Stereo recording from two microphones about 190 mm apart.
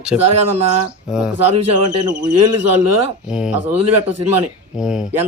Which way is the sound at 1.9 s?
20° right (ahead or behind).